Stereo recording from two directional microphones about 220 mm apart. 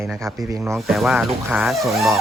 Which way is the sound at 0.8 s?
Centre (ahead or behind).